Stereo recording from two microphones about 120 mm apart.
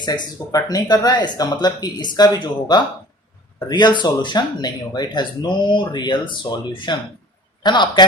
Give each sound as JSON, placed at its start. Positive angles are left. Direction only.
{"t": 0.0, "sound": "speech", "side_deg": 35}